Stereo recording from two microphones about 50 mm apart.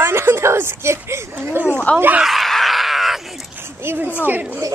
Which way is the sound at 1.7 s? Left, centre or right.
Left.